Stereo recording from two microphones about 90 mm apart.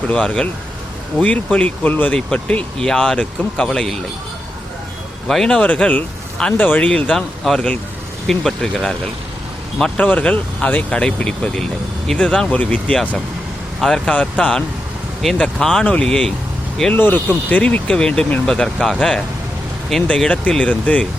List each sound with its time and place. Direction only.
0.1 s speech: 10° left (ahead or behind)
5.3 s speech: 5° left (ahead or behind)
10.1 s speech: 15° left (ahead or behind)
16.9 s speech: 20° left (ahead or behind)
17.6 s speech: 10° left (ahead or behind)